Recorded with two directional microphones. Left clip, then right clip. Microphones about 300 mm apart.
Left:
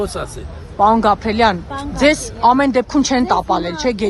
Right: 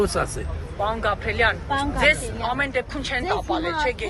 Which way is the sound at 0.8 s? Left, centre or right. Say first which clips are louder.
Left 12 dB; left.